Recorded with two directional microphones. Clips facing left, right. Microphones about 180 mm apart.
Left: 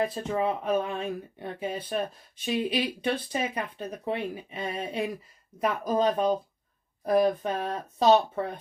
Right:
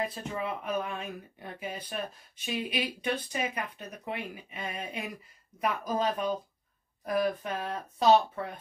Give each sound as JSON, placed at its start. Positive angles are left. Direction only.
{"t": 0.1, "sound": "speech", "side_deg": 30}